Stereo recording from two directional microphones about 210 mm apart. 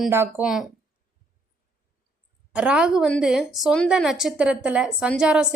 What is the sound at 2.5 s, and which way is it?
A woman's voice, 5° right (ahead or behind).